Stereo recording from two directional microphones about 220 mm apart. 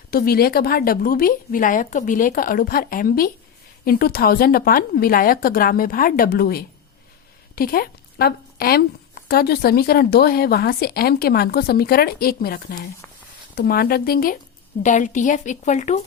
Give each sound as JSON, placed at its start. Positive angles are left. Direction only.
{"t": 0.1, "sound": "speech", "side_deg": 40}